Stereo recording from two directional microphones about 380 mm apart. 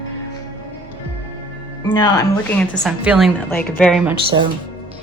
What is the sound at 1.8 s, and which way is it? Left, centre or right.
A woman's voice, centre.